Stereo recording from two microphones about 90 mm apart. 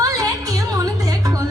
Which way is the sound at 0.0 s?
40° right (ahead or behind).